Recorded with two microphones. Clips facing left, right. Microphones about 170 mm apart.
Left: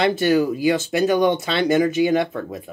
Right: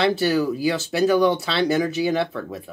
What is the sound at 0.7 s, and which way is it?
Speech, 15° left (ahead or behind).